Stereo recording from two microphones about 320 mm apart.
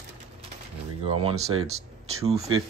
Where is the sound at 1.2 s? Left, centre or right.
Centre.